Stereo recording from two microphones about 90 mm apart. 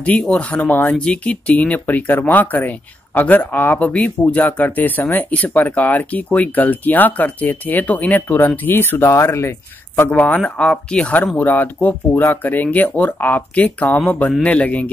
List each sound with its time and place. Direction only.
0.0 s speech: 10° left (ahead or behind); by 9.5 s 30° left (ahead or behind)
9.9 s speech: 20° left (ahead or behind)